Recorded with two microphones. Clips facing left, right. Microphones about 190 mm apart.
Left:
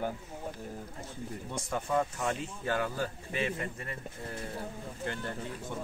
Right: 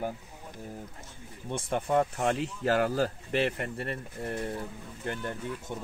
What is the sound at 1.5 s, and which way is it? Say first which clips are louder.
Speech: right 5 dB; 30° right (ahead or behind).